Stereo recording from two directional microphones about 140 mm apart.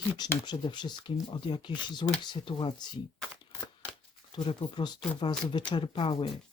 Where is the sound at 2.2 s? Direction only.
30° left (ahead or behind).